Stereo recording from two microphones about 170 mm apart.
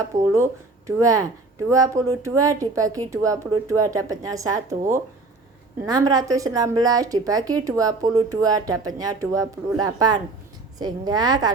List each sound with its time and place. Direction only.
0.0 s a woman's voice: 15° right (ahead or behind)
5.8 s a woman's voice: 20° right (ahead or behind)